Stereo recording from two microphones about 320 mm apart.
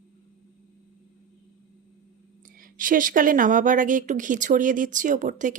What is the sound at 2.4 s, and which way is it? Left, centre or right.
A woman's voice, right.